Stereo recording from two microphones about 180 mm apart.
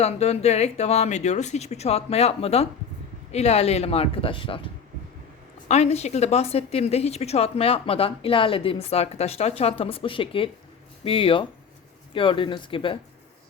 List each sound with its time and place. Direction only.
0.0 s a woman's voice: 35° left (ahead or behind)